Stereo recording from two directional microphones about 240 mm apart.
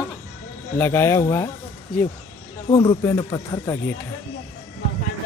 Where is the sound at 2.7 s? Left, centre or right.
Centre.